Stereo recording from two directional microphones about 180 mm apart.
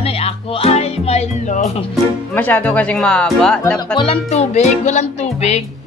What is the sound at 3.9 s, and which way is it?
Music, 30° left (ahead or behind).